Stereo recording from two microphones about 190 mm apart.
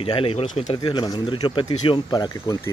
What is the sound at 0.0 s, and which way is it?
Speech, 30° left (ahead or behind).